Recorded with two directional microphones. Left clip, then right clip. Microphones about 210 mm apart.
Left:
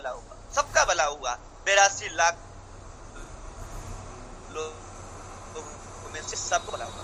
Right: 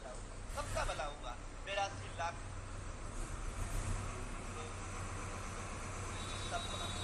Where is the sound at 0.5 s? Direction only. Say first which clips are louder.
Left 18 dB; 45° left (ahead or behind).